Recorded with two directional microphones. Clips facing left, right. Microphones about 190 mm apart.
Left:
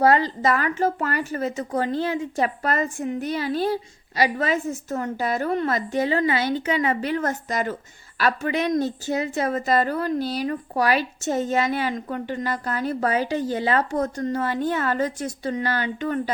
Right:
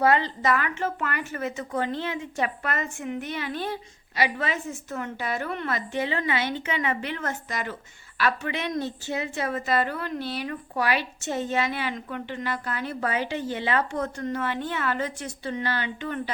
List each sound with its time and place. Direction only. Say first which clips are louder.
0.0 s a woman's voice: left 4 dB; 35° left (ahead or behind)